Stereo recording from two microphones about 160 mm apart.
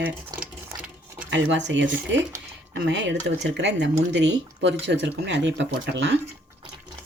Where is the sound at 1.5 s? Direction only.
90° right.